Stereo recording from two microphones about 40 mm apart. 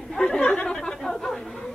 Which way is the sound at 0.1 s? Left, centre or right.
Centre.